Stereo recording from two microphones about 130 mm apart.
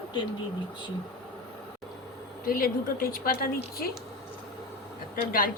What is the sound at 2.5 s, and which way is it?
Speech, 90° left.